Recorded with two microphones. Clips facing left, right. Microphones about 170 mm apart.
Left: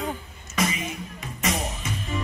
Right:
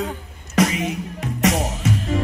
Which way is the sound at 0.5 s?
80° right.